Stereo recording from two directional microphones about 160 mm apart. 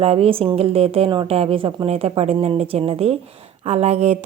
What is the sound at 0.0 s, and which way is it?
A woman's voice, 40° right (ahead or behind).